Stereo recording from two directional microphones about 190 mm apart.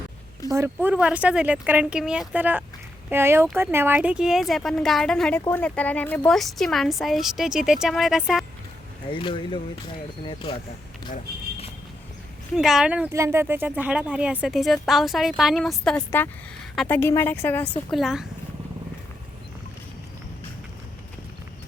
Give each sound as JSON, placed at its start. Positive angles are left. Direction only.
{"t": 0.5, "sound": "speech", "side_deg": -10}
{"t": 9.1, "sound": "speech", "side_deg": 25}
{"t": 12.5, "sound": "speech", "side_deg": -5}
{"t": 17.9, "sound": "speech", "side_deg": 0}